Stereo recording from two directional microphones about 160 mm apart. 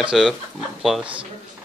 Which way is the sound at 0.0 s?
Centre (ahead or behind).